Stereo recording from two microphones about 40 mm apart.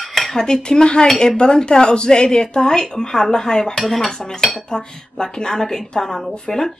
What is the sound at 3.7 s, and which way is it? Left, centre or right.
Dishes, centre.